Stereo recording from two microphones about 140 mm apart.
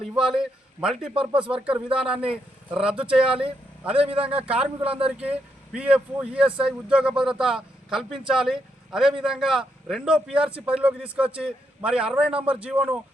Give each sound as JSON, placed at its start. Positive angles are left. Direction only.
{"t": 0.1, "sound": "a man's voice", "side_deg": -5}
{"t": 1.1, "sound": "speech", "side_deg": -35}
{"t": 1.6, "sound": "speech", "side_deg": -5}
{"t": 4.8, "sound": "speech", "side_deg": -40}
{"t": 5.0, "sound": "speech", "side_deg": -10}